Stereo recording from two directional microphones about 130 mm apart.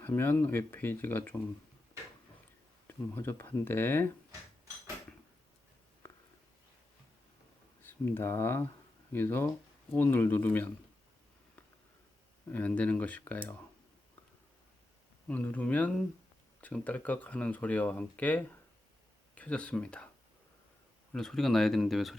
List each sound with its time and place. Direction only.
0.0 s speech: 15° left (ahead or behind)
2.8 s speech: 15° left (ahead or behind)
7.8 s speech: 15° left (ahead or behind)
12.5 s speech: 10° left (ahead or behind)
15.3 s speech: 10° left (ahead or behind)
21.1 s speech: 5° left (ahead or behind)